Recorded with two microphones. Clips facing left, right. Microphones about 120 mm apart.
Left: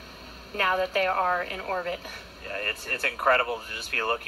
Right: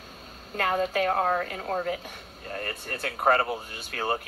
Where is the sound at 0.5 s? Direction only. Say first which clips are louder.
Even; 60° left (ahead or behind).